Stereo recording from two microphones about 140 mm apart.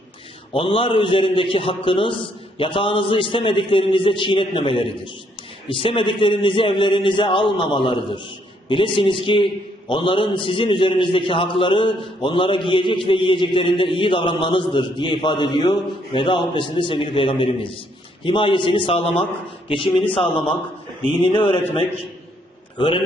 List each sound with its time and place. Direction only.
0.5 s a man's voice: 35° left (ahead or behind)
21.2 s a man's voice: 35° left (ahead or behind)